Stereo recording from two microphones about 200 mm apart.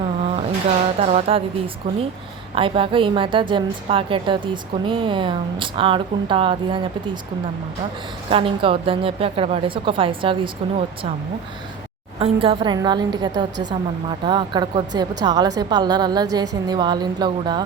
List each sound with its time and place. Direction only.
0.9 s a woman's voice: 30° right (ahead or behind)
8.3 s a woman's voice: 25° right (ahead or behind)
12.2 s a woman's voice: 25° right (ahead or behind)